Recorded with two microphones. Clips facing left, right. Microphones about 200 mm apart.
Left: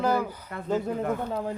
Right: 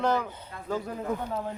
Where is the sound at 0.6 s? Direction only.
25° left (ahead or behind).